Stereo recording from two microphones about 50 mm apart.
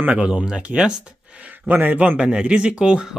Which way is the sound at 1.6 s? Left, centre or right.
Right.